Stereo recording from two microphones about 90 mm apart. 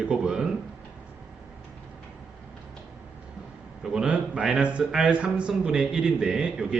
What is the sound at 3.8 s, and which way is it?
A man's voice, 5° right (ahead or behind).